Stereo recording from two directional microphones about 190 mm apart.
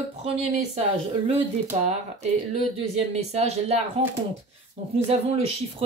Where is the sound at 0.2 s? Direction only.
35° right (ahead or behind).